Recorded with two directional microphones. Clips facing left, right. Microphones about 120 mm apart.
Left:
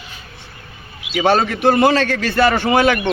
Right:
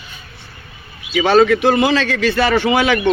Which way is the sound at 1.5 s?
50° left (ahead or behind).